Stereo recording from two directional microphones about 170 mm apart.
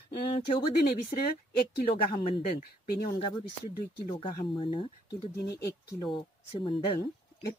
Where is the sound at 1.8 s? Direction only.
60° left (ahead or behind).